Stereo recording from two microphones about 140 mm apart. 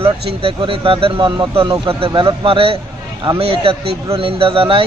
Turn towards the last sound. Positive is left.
turn(degrees=-40)  # may be behind; listen again after turning